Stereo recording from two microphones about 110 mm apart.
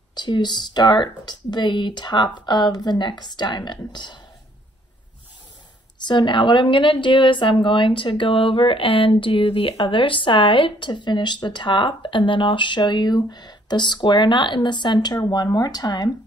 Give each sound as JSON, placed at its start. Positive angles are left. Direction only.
{"t": 0.1, "sound": "speech", "side_deg": 40}
{"t": 6.0, "sound": "speech", "side_deg": 45}